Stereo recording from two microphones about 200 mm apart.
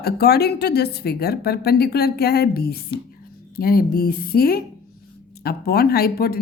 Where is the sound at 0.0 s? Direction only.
50° left (ahead or behind).